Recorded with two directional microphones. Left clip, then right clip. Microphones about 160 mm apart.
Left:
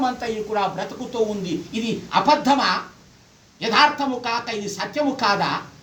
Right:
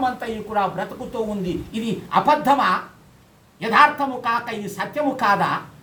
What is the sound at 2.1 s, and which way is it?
Speech, 5° right (ahead or behind).